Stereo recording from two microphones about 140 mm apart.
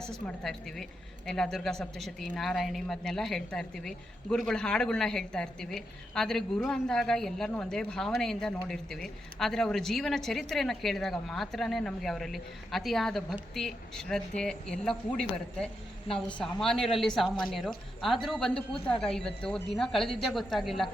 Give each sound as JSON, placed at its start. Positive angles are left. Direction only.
{"t": 0.3, "sound": "speech", "side_deg": 0}